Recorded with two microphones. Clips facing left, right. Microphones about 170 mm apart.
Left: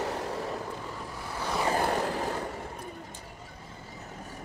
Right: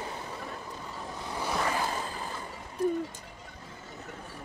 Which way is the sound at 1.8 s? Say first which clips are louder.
Left 5 dB; 65° left (ahead or behind).